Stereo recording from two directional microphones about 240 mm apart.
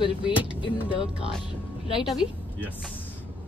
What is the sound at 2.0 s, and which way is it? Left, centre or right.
Speech, centre.